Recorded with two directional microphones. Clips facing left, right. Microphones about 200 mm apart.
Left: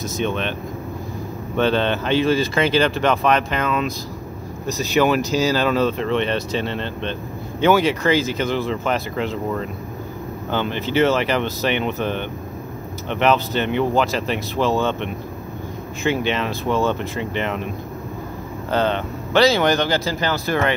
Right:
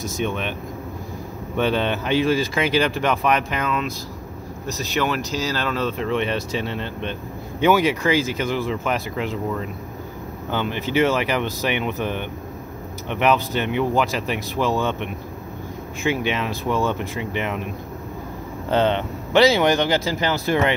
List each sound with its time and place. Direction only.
0.0 s speech: 10° right (ahead or behind)
1.6 s speech: 10° right (ahead or behind)
10.5 s speech: 10° right (ahead or behind)
18.7 s speech: 20° right (ahead or behind)